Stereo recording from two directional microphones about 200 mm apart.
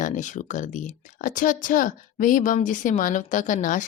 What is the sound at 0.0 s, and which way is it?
Speech, 40° left (ahead or behind).